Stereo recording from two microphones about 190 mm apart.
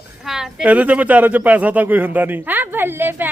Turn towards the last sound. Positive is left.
turn(degrees=-10)  # may be behind; listen again after turning